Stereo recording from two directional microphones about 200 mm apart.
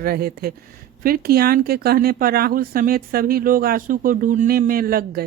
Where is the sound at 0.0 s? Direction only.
50° right (ahead or behind).